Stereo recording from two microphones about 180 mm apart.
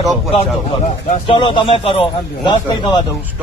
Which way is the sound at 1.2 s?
30° left (ahead or behind).